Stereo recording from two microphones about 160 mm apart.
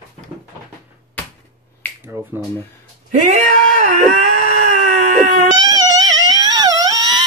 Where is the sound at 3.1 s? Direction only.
50° right (ahead or behind).